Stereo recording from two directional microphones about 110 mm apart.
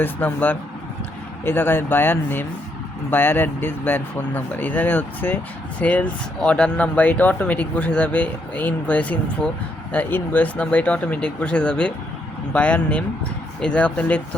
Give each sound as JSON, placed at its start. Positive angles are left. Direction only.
{"t": 0.0, "sound": "speech", "side_deg": 15}